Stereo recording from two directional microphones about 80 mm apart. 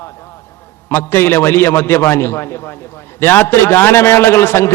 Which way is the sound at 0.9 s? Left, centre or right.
Left.